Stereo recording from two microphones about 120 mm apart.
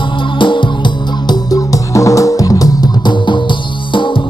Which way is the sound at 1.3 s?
30° left (ahead or behind).